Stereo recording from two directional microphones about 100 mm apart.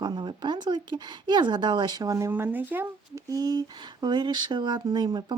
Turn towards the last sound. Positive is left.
turn(degrees=-45)  # may be behind; listen again after turning